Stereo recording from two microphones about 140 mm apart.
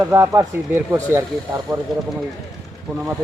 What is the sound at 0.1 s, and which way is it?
A man's voice, 20° right (ahead or behind).